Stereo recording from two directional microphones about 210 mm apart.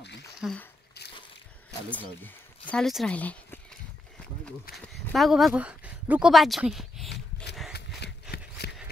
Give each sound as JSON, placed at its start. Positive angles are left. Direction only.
{"t": 0.4, "sound": "speech", "side_deg": 0}
{"t": 1.9, "sound": "speech", "side_deg": 5}
{"t": 4.7, "sound": "speech", "side_deg": 0}
{"t": 8.0, "sound": "a sound", "side_deg": 50}